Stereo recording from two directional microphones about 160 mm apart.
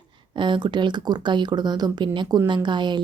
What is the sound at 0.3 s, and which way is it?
A woman's voice, 30° right (ahead or behind).